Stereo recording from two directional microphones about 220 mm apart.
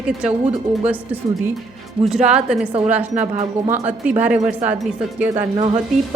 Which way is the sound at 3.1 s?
30° right (ahead or behind).